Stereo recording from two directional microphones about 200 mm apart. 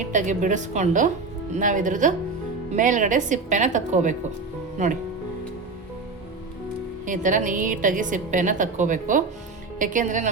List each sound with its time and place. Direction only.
0.0 s a woman's voice: 40° right (ahead or behind)
7.0 s a woman's voice: 40° right (ahead or behind)